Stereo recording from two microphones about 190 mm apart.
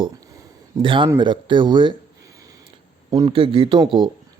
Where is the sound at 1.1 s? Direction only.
25° right (ahead or behind).